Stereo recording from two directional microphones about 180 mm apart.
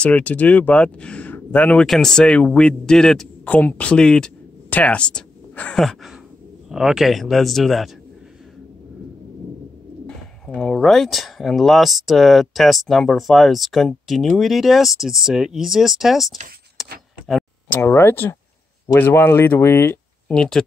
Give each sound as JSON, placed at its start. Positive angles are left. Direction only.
{"t": 0.0, "sound": "speech", "side_deg": 10}
{"t": 10.0, "sound": "speech", "side_deg": 5}
{"t": 16.8, "sound": "a sound", "side_deg": 0}
{"t": 17.7, "sound": "speech", "side_deg": 15}